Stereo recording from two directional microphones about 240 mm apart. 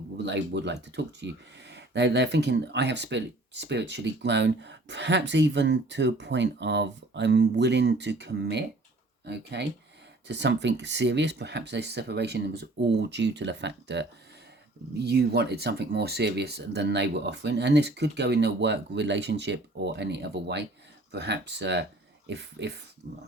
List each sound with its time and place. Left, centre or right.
0.3 s speech: right